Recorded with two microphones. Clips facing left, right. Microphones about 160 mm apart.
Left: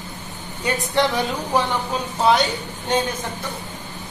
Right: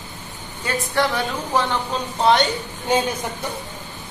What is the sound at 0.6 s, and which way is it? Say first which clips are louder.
Speech: left 1 dB; 20° left (ahead or behind).